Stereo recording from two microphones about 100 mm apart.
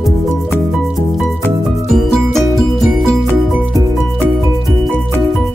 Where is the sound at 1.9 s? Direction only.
Centre (ahead or behind).